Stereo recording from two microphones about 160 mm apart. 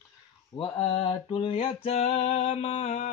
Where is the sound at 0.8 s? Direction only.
35° left (ahead or behind).